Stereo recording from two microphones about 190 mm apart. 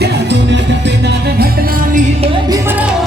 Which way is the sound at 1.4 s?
50° right (ahead or behind).